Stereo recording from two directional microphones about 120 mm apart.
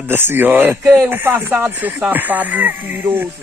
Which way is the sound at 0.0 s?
20° right (ahead or behind).